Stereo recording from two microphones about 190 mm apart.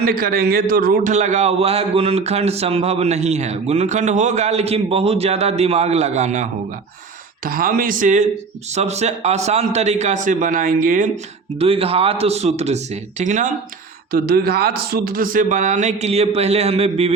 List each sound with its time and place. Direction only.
0.0 s a man's voice: 50° right (ahead or behind)
7.4 s a man's voice: 50° right (ahead or behind)
11.6 s a man's voice: 30° right (ahead or behind)
14.1 s a man's voice: 55° right (ahead or behind); by 17.2 s 30° right (ahead or behind)